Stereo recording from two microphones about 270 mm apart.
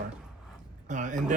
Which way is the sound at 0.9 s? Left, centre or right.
Right.